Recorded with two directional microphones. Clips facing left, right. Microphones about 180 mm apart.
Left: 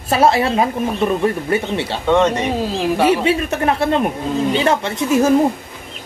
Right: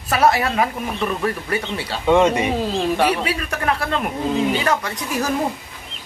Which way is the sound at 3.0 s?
25° left (ahead or behind).